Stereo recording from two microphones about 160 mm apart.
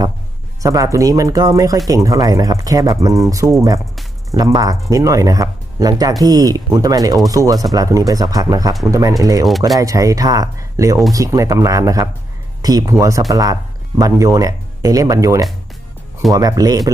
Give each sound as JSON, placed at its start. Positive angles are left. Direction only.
{"t": 0.6, "sound": "speech", "side_deg": -20}
{"t": 9.4, "sound": "speech", "side_deg": 0}
{"t": 9.7, "sound": "speech", "side_deg": -20}